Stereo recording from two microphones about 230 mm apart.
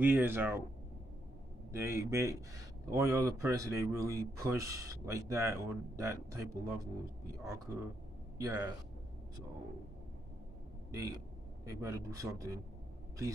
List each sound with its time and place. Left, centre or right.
0.0 s speech: centre
1.7 s a man's voice: centre
10.9 s speech: centre